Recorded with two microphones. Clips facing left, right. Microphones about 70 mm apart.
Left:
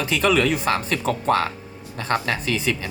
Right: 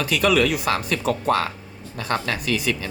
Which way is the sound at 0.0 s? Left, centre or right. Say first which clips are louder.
Even; left.